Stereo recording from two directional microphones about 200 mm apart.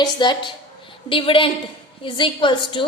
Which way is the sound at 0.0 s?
20° left (ahead or behind).